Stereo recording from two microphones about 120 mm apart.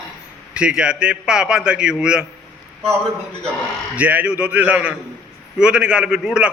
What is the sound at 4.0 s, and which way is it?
A man's voice, 10° right (ahead or behind).